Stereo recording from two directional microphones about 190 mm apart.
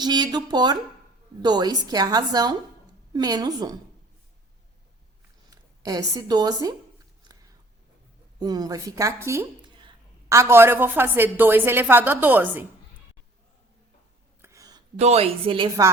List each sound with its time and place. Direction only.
0.0 s a woman's voice: 20° right (ahead or behind)
5.5 s speech: 20° right (ahead or behind)
8.4 s a woman's voice: 20° right (ahead or behind)
14.4 s a sound: 15° right (ahead or behind)
14.9 s a woman's voice: 35° right (ahead or behind)